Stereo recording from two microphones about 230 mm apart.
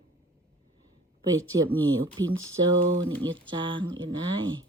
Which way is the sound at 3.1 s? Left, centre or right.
Right.